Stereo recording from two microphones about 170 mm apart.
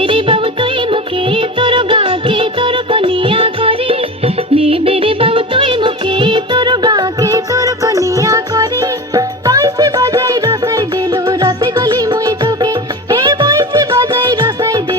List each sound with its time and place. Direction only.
0.0 s music: 30° right (ahead or behind)